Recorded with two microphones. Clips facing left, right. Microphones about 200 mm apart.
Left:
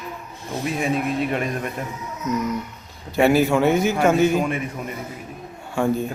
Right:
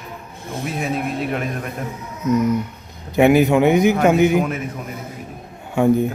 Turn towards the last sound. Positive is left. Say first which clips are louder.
# right 6 dB
turn(degrees=-20)  # may be behind; listen again after turning